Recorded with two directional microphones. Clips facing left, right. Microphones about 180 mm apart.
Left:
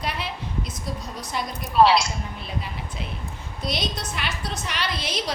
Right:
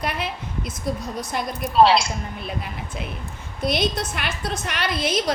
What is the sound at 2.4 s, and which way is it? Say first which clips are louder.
A woman's voice: right 2 dB; 55° right (ahead or behind).